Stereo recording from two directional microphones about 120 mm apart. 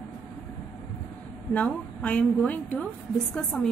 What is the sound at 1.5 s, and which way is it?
A woman's voice, 10° left (ahead or behind).